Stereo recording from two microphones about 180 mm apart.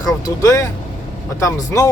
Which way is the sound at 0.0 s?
20° left (ahead or behind).